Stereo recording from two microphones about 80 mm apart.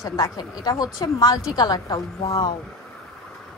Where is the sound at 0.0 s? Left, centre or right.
Left.